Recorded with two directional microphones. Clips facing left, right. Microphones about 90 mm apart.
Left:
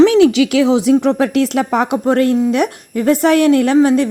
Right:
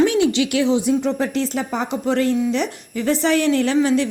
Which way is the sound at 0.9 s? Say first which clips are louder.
Left 7 dB; 65° left (ahead or behind).